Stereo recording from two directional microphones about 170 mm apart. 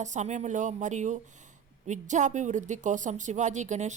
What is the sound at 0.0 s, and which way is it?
A woman's voice, 45° right (ahead or behind).